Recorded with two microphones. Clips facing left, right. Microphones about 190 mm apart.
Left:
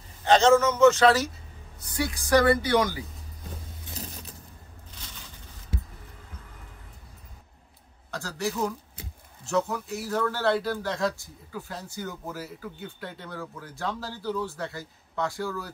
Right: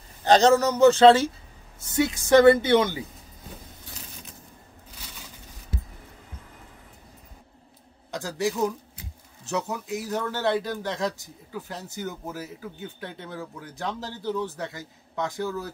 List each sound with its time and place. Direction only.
0.2 s a man's voice: 40° right (ahead or behind)
8.1 s a man's voice: 15° right (ahead or behind)